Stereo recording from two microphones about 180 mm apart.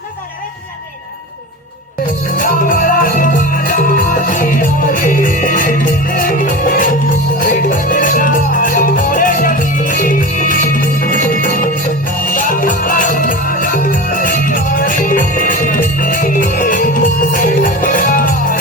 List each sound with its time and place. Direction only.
2.4 s music: 50° left (ahead or behind)